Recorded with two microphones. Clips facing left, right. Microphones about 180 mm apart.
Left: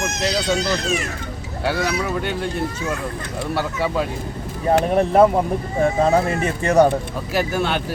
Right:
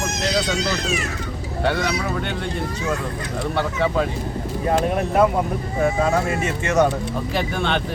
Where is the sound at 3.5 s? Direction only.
5° left (ahead or behind).